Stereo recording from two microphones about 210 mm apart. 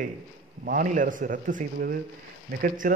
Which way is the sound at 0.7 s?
40° right (ahead or behind).